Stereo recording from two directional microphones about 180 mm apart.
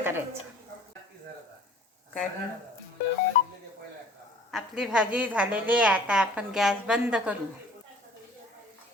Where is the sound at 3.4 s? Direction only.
50° left (ahead or behind).